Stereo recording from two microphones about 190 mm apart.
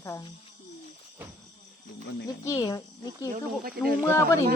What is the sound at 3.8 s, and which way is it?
Speech, 55° right (ahead or behind).